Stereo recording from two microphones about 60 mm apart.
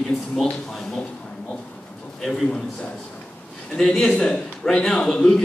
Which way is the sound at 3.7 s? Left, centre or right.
Centre.